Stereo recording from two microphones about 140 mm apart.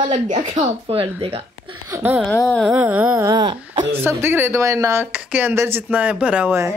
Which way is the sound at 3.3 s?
30° right (ahead or behind).